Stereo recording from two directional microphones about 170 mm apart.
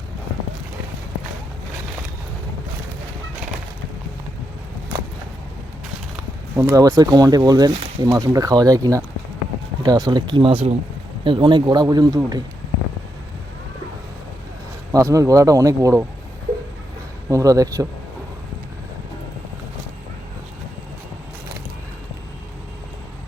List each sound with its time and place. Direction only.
6.6 s speech: 15° right (ahead or behind)
14.9 s speech: 20° right (ahead or behind)
17.2 s speech: 20° right (ahead or behind)